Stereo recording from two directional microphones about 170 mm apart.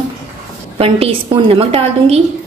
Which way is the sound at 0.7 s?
35° right (ahead or behind).